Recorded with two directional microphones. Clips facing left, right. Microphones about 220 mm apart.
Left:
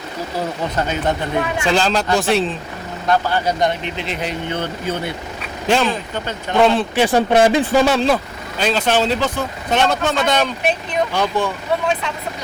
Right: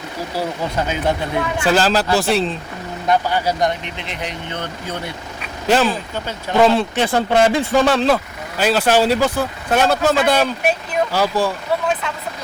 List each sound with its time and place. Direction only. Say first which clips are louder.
0.3 s speech: even; 10° right (ahead or behind)
3.1 s speech: even; 15° right (ahead or behind)
5.7 s speech: right 1 dB; 5° right (ahead or behind)
6.9 s speech: left 2 dB; 15° left (ahead or behind); by 11.5 s 5° right (ahead or behind)